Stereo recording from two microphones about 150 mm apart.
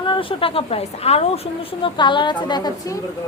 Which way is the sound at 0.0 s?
35° left (ahead or behind).